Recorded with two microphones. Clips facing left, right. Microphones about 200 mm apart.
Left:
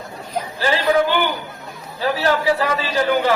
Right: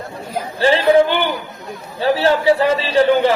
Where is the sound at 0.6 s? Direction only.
30° right (ahead or behind).